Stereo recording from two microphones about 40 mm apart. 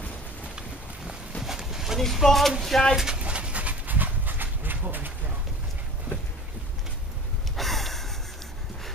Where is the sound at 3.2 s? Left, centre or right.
Right.